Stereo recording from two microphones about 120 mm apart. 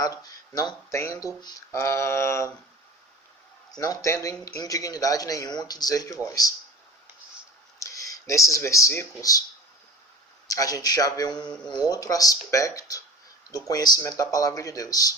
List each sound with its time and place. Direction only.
0.0 s speech: 30° left (ahead or behind)
3.7 s speech: 30° left (ahead or behind)
7.8 s speech: 25° left (ahead or behind)
10.5 s speech: 30° left (ahead or behind)